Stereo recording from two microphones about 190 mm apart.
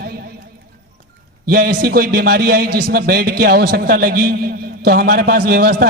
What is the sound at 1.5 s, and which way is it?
A man's voice, 55° right (ahead or behind).